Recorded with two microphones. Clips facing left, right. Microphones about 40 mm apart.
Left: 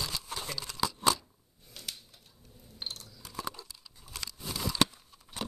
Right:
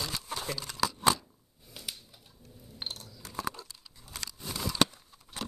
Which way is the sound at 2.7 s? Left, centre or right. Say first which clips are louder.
Right 1 dB; right.